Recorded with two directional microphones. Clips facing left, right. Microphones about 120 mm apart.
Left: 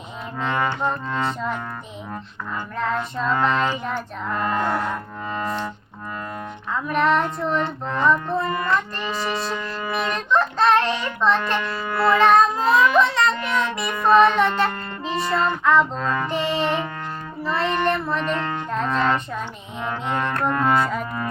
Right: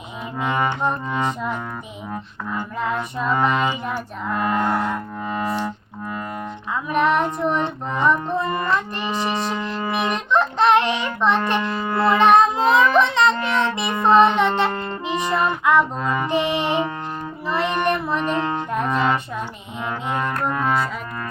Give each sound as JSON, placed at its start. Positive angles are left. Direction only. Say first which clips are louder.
{"t": 0.3, "sound": "music", "louder": "right 1 dB", "side_deg": -15}
{"t": 2.8, "sound": "child singing", "louder": "left 1 dB", "side_deg": -10}
{"t": 6.8, "sound": "music", "louder": "right 1 dB", "side_deg": -15}
{"t": 9.9, "sound": "child singing", "louder": "right 1 dB", "side_deg": -15}
{"t": 11.9, "sound": "music", "louder": "right 1 dB", "side_deg": -20}
{"t": 13.0, "sound": "child singing", "louder": "right 2 dB", "side_deg": -20}
{"t": 13.4, "sound": "music", "louder": "right 2 dB", "side_deg": -20}